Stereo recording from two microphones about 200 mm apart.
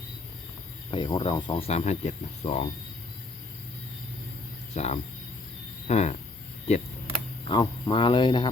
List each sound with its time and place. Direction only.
0.9 s speech: 25° left (ahead or behind)
4.7 s speech: 30° left (ahead or behind)
7.4 s speech: 20° left (ahead or behind)